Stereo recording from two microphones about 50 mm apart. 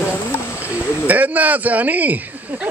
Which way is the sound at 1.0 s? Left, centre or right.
Right.